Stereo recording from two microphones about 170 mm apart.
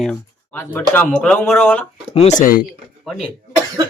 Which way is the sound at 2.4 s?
60° left (ahead or behind).